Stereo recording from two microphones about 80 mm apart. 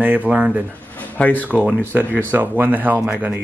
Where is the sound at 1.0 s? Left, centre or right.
Centre.